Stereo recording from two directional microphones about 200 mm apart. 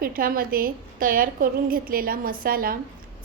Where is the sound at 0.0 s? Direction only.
45° right (ahead or behind).